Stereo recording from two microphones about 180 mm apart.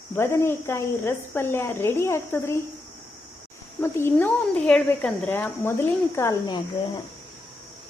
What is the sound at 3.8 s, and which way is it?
A child's voice, 15° left (ahead or behind).